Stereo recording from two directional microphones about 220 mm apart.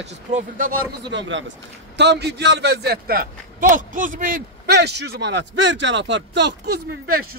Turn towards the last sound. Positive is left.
turn(degrees=-50)  # may be behind; listen again after turning